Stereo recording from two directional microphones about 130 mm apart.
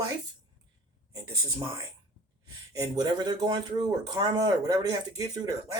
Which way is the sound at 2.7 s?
30° right (ahead or behind).